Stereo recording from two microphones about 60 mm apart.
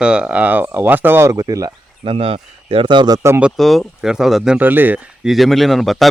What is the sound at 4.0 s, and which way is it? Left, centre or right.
Speech, centre.